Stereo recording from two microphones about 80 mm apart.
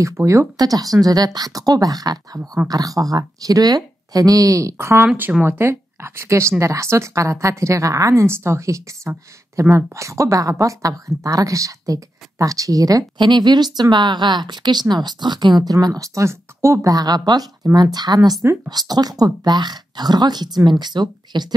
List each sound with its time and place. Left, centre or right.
0.0 s speech: right
5.0 s speech: right
13.2 s speech: right
15.6 s speech: right
16.9 s speech: right